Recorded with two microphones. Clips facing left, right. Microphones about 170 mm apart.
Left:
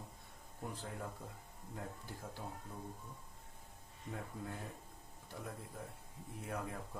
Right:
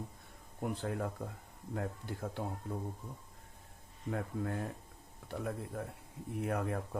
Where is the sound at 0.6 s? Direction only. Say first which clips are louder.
Right 9 dB; 70° right (ahead or behind).